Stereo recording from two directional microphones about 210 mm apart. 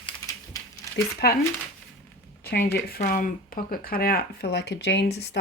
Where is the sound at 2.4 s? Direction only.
50° left (ahead or behind).